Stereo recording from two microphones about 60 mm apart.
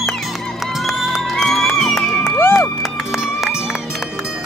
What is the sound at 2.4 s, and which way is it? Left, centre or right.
Music, left.